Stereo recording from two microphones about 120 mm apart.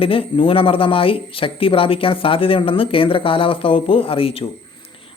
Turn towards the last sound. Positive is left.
turn(degrees=50)  # may be behind; listen again after turning